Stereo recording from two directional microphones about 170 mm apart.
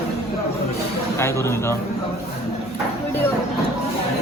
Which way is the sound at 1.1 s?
15° left (ahead or behind).